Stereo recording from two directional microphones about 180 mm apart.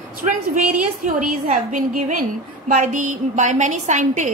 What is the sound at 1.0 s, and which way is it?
A woman's voice, 45° right (ahead or behind).